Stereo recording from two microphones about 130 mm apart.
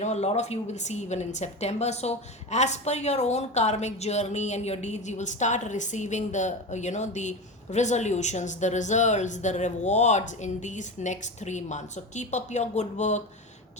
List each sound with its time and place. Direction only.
0.0 s a woman's voice: 55° left (ahead or behind)